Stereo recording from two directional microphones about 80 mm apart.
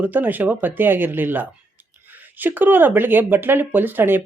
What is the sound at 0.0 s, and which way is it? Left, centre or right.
Speech, right.